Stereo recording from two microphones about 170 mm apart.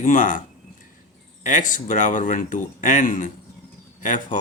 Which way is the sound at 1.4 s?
50° left (ahead or behind).